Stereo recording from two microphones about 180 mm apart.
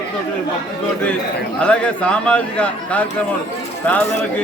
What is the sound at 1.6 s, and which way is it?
A man's voice, 5° left (ahead or behind).